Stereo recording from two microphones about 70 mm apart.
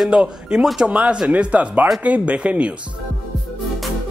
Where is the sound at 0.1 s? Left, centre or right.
Centre.